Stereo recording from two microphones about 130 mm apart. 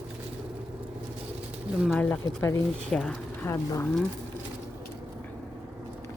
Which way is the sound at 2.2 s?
20° left (ahead or behind).